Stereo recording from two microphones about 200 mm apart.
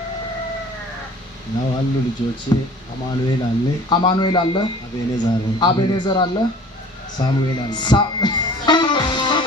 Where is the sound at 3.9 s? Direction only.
20° left (ahead or behind).